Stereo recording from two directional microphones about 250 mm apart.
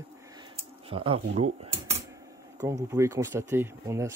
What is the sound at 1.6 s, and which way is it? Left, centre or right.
Typewriter, right.